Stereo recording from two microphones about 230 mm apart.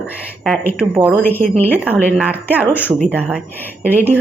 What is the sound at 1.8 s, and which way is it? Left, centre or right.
Speech, centre.